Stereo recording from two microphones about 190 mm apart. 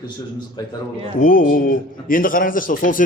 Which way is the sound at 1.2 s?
45° left (ahead or behind).